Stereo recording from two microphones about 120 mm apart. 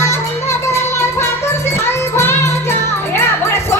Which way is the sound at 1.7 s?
20° left (ahead or behind).